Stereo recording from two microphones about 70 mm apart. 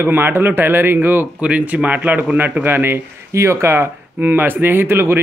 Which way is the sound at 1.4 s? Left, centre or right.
Centre.